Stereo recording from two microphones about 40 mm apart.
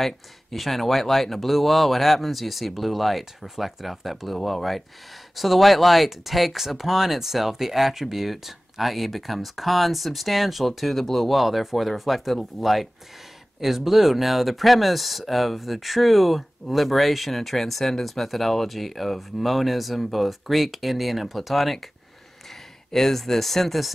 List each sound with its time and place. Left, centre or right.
0.0 s speech: centre
22.8 s speech: centre